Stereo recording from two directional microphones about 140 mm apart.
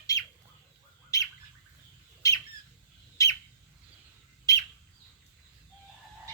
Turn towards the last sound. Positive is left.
turn(degrees=25)  # may be behind; listen again after turning